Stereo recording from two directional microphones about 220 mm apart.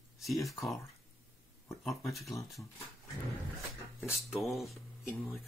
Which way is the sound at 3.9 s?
Centre (ahead or behind).